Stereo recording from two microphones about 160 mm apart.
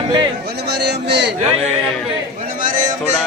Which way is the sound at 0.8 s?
90° right.